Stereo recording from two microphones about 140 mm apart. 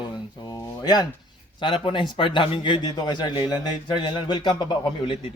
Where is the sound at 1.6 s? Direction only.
35° left (ahead or behind).